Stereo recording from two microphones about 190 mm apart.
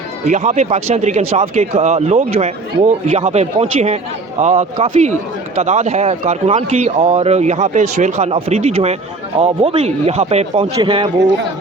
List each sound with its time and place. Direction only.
0.3 s speech: 40° right (ahead or behind)